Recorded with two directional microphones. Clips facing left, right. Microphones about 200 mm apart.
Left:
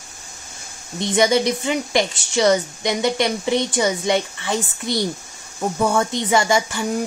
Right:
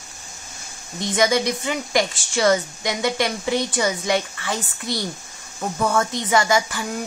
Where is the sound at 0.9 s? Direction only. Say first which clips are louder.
Left 3 dB; 25° left (ahead or behind).